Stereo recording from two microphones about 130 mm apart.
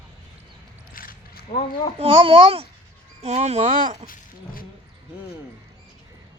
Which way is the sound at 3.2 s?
55° right (ahead or behind).